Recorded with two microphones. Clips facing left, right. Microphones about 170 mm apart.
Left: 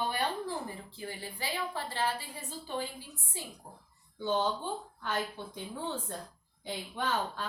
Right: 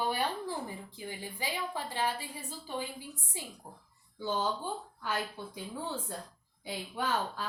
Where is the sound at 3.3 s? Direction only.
15° right (ahead or behind).